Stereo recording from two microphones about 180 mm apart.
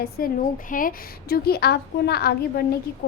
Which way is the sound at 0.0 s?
50° left (ahead or behind).